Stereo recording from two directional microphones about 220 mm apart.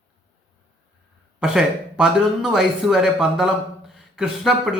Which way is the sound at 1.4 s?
Centre (ahead or behind).